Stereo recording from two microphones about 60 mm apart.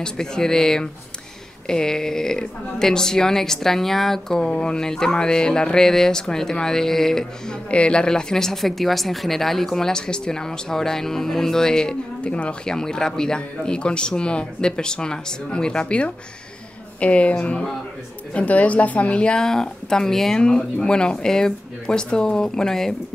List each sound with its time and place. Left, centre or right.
0.0 s a woman's voice: centre